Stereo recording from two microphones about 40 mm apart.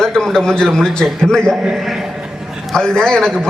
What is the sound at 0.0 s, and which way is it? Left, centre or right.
A man's voice, centre.